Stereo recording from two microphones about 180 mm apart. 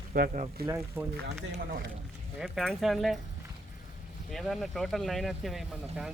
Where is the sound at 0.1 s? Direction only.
55° right (ahead or behind).